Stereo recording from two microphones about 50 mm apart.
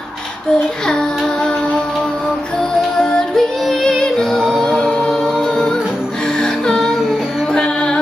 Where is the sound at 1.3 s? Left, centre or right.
Centre.